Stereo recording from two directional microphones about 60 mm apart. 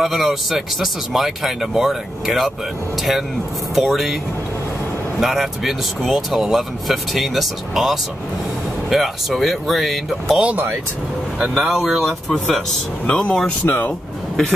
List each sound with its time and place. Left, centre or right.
0.0 s speech: centre
5.2 s speech: centre
11.7 s speech: centre
13.0 s speech: centre
13.7 s speech: left